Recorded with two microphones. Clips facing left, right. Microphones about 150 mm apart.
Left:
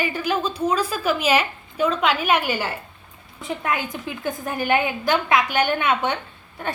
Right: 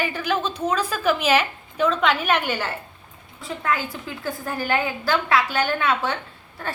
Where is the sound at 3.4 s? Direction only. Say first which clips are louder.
Even; 20° left (ahead or behind).